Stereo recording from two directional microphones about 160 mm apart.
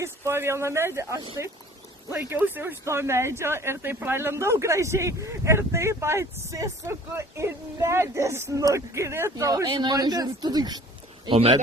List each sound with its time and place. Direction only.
0.0 s speech: 15° right (ahead or behind)
11.3 s speech: 35° right (ahead or behind)